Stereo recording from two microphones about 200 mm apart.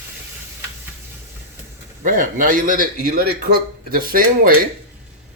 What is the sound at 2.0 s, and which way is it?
A man's voice, 40° right (ahead or behind).